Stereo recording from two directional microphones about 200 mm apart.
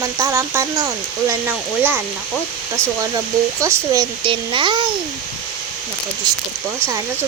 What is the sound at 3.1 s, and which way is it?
A child's voice, 15° right (ahead or behind).